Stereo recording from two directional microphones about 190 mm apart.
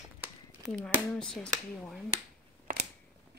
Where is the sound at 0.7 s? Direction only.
5° left (ahead or behind).